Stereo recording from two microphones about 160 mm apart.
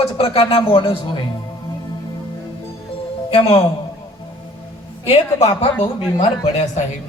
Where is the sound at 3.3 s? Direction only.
35° left (ahead or behind).